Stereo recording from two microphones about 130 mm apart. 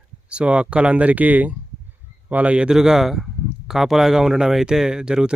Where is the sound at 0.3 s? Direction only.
10° right (ahead or behind).